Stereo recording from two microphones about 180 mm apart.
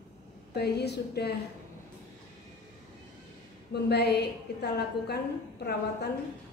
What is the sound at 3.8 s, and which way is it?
A woman's voice, 65° left (ahead or behind).